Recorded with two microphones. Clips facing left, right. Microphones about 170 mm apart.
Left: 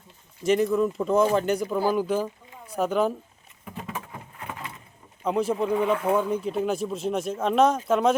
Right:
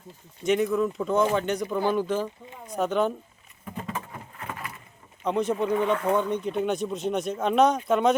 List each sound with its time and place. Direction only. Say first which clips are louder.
0.4 s speech: left 2 dB; centre (ahead or behind)
3.8 s patter: right 1 dB; 5° left (ahead or behind)
4.4 s vehicle: even; 15° left (ahead or behind)
5.2 s speech: left 1 dB; 5° left (ahead or behind)